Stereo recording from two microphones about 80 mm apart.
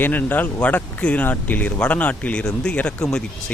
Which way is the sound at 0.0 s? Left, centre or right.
Left.